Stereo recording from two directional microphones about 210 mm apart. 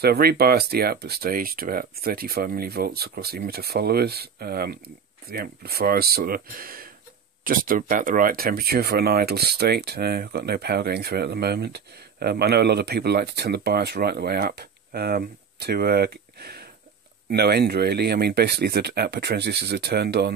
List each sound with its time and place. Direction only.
0.0 s speech: 50° right (ahead or behind)